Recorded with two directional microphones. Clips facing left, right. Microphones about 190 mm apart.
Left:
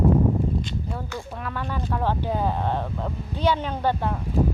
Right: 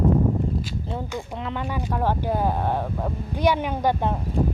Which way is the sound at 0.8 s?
20° right (ahead or behind).